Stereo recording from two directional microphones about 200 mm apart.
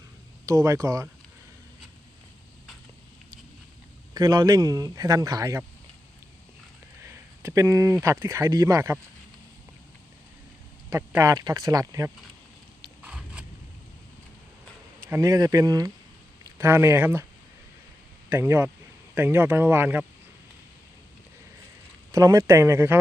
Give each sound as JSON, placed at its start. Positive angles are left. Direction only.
{"t": 0.4, "sound": "speech", "side_deg": -15}
{"t": 4.1, "sound": "speech", "side_deg": -20}
{"t": 7.4, "sound": "speech", "side_deg": -15}
{"t": 10.8, "sound": "speech", "side_deg": -15}
{"t": 13.0, "sound": "a sound", "side_deg": -5}
{"t": 15.0, "sound": "speech", "side_deg": -15}
{"t": 18.3, "sound": "speech", "side_deg": -10}
{"t": 22.1, "sound": "speech", "side_deg": -15}